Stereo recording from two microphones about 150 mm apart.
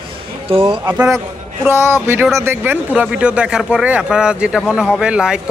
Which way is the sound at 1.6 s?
15° right (ahead or behind).